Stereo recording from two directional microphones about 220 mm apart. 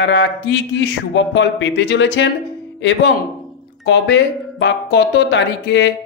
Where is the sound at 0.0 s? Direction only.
55° left (ahead or behind).